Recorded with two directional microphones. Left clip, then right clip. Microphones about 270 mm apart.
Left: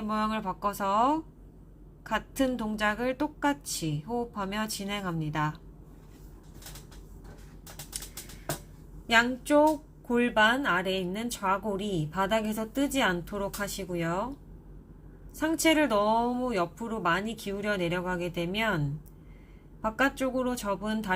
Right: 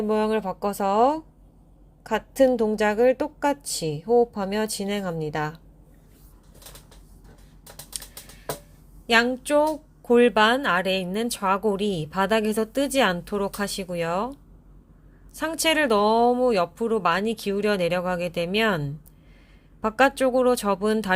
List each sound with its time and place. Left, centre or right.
0.1 s a woman's voice: right
9.1 s speech: right
15.4 s speech: right
19.8 s speech: right